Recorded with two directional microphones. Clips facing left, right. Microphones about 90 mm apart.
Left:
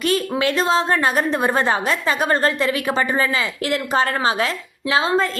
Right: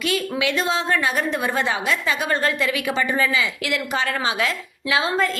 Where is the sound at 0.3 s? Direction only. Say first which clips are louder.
Left 4 dB; 40° left (ahead or behind).